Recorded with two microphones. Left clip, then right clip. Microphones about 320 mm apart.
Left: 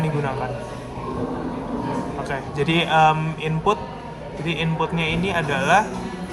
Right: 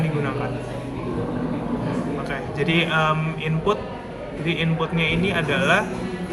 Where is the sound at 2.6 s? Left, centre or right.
Centre.